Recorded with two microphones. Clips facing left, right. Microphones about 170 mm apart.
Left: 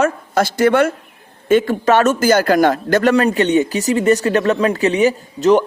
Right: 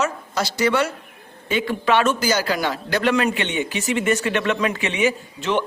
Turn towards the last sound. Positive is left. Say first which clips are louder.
# left 10 dB
turn(degrees=40)  # may be behind; listen again after turning